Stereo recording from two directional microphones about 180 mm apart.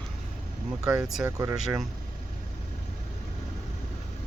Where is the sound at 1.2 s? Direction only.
15° right (ahead or behind).